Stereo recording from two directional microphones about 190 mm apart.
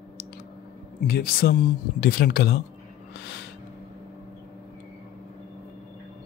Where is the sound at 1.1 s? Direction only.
50° left (ahead or behind).